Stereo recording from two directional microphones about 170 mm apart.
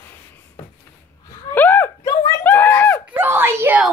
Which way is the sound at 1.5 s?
10° left (ahead or behind).